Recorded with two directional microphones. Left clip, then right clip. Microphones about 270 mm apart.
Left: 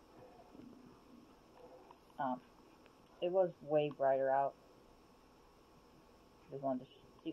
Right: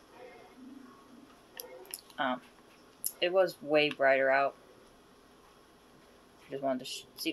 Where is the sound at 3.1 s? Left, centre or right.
Right.